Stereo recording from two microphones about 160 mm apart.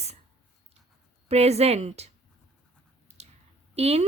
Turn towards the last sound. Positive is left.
turn(degrees=-40)  # may be behind; listen again after turning